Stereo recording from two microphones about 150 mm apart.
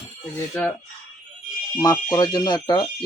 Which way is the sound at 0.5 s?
10° left (ahead or behind).